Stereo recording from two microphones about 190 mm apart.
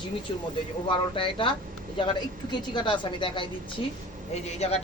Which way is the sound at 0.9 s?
25° left (ahead or behind).